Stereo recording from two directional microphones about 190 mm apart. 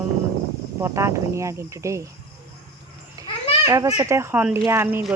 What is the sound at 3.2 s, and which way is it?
Children playing, 20° right (ahead or behind).